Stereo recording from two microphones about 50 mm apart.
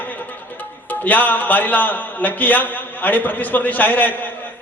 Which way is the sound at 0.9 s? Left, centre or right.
Left.